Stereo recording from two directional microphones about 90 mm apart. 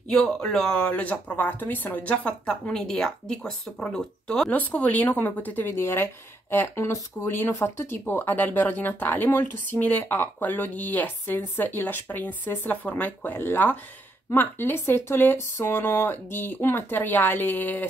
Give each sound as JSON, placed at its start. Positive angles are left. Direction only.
{"t": 0.1, "sound": "speech", "side_deg": 5}
{"t": 4.5, "sound": "speech", "side_deg": 20}